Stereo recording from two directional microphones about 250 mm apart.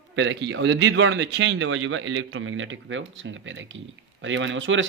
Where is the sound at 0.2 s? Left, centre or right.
Right.